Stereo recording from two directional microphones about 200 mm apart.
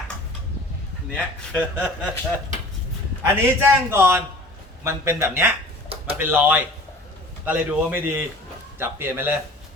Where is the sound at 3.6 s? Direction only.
10° right (ahead or behind).